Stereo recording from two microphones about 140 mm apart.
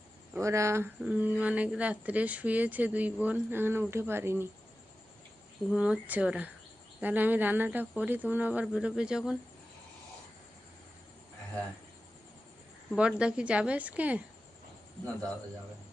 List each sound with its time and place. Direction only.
0.3 s speech: 20° right (ahead or behind)
1.0 s speech: 10° right (ahead or behind)
5.7 s speech: 5° right (ahead or behind)
13.0 s speech: 5° right (ahead or behind)